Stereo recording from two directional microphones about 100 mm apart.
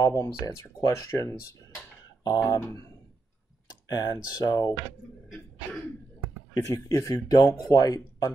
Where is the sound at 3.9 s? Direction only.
45° left (ahead or behind).